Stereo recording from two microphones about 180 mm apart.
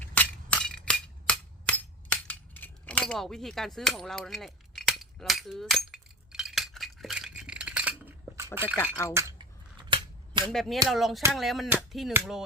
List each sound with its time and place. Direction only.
0.0 s chink: 10° left (ahead or behind)
3.8 s cap gun: centre (ahead or behind)
8.5 s speech: 10° right (ahead or behind)
9.1 s cutlery: 15° right (ahead or behind)
9.9 s cap gun: 25° right (ahead or behind)
10.5 s a sound: centre (ahead or behind)